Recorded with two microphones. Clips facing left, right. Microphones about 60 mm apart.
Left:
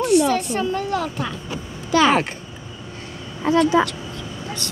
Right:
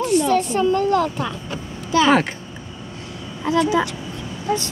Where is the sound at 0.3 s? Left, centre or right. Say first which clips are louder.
Right 4 dB; centre.